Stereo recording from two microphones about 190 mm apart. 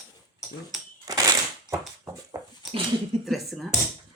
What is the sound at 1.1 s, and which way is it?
Crushing, 15° right (ahead or behind).